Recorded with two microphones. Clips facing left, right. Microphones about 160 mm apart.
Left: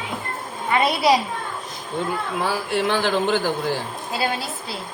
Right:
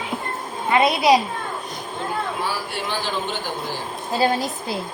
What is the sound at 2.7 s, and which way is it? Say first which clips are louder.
Speech: left 6 dB; 80° left.